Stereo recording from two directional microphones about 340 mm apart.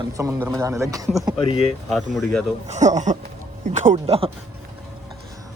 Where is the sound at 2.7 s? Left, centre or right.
Right.